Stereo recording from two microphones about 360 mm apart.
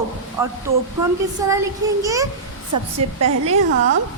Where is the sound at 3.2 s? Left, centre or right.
Right.